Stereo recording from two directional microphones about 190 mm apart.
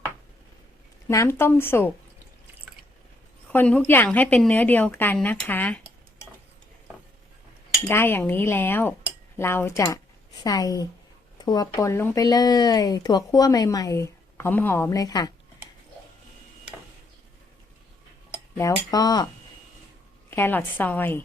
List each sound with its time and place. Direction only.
1.0 s a woman's voice: 15° left (ahead or behind)
3.5 s a woman's voice: 10° left (ahead or behind)
7.9 s a woman's voice: 10° left (ahead or behind)
18.5 s speech: 20° left (ahead or behind)
20.3 s a woman's voice: 10° left (ahead or behind)